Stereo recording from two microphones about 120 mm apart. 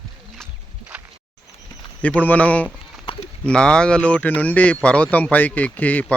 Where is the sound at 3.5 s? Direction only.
5° left (ahead or behind).